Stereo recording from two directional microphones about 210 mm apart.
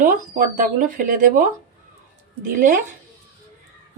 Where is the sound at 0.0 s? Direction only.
40° right (ahead or behind).